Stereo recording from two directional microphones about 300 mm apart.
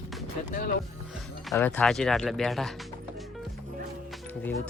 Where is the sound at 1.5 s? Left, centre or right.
Centre.